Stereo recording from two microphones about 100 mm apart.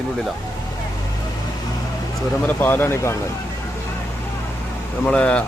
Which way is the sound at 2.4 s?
20° left (ahead or behind).